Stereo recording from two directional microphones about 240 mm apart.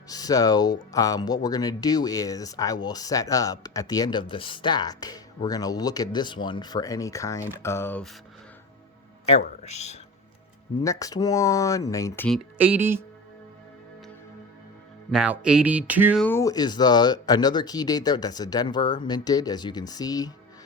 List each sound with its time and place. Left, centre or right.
0.1 s speech: centre
9.6 s speech: left
10.8 s speech: centre
12.5 s music: centre
15.1 s speech: centre
16.2 s speech: centre